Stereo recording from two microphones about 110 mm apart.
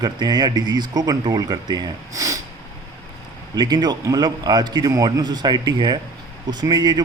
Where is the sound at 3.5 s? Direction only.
40° right (ahead or behind).